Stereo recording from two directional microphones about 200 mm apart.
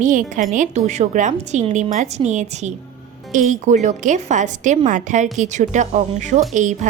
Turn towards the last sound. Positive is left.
turn(degrees=-40)  # may be behind; listen again after turning